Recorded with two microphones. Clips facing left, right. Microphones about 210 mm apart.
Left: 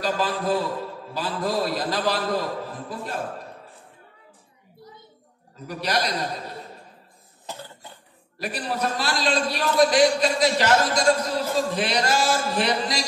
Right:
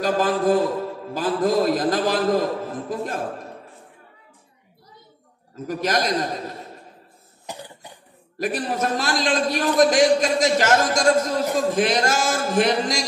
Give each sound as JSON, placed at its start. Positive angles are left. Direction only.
{"t": 0.0, "sound": "a man's voice", "side_deg": -45}
{"t": 5.7, "sound": "a man's voice", "side_deg": -45}
{"t": 7.4, "sound": "cough", "side_deg": -15}
{"t": 8.4, "sound": "a man's voice", "side_deg": -45}